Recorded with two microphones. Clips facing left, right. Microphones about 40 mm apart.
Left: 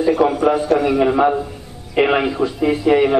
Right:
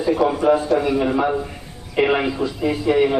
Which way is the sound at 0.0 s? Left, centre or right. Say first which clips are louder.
Left 3 dB; left.